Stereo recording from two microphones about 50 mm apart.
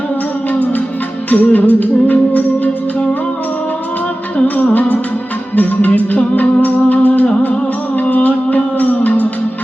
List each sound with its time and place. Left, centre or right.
1.3 s music: left
4.4 s music: left